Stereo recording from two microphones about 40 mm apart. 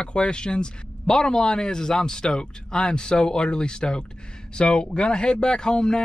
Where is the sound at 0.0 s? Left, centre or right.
Left.